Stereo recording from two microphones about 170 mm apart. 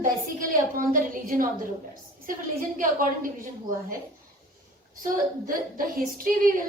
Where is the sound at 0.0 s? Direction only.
50° right (ahead or behind).